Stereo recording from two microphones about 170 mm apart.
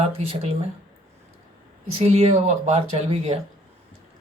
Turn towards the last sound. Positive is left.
turn(degrees=-40)  # may be behind; listen again after turning